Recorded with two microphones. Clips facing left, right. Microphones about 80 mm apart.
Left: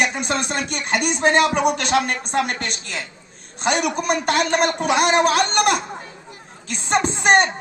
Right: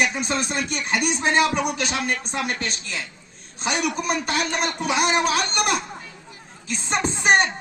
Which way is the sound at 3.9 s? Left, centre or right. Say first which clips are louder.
Left 4 dB; left.